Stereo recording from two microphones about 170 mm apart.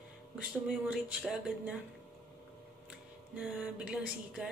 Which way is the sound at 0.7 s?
5° right (ahead or behind).